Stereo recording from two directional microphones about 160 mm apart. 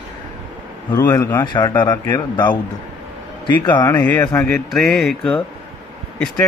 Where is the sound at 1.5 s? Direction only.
30° left (ahead or behind).